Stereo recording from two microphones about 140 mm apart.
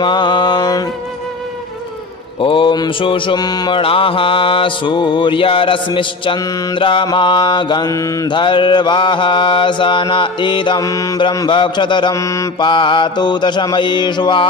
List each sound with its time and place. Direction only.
0.0 s mantra: 30° left (ahead or behind)
2.4 s mantra: 35° left (ahead or behind)